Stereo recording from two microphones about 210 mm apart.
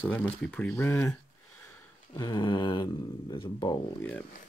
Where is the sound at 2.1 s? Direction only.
20° left (ahead or behind).